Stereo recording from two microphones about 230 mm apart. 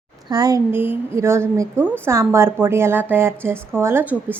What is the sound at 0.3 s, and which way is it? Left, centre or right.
A woman's voice, centre.